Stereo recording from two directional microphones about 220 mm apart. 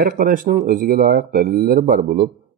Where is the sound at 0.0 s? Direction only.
40° right (ahead or behind).